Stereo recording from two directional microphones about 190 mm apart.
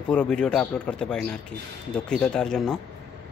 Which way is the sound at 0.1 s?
5° left (ahead or behind).